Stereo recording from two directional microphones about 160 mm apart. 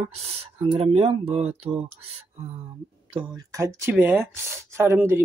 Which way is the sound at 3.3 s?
20° right (ahead or behind).